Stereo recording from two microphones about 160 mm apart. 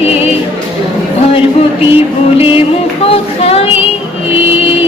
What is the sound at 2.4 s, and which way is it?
Music, 35° left (ahead or behind).